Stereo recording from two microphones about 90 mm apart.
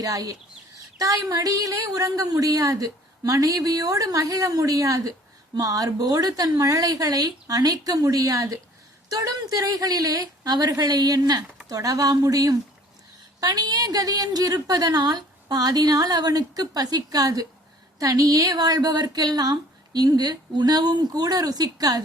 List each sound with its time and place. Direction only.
0.0 s a woman's voice: 40° right (ahead or behind)